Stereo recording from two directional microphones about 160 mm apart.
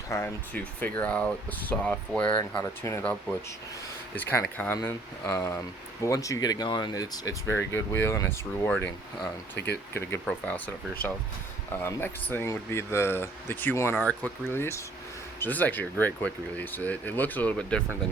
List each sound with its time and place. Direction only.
0.1 s speech: 15° left (ahead or behind)
9.6 s speech: 90° left
9.9 s speech: 15° left (ahead or behind)
11.8 s speech: 15° left (ahead or behind)